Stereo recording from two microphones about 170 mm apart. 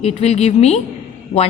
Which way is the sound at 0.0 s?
40° left (ahead or behind).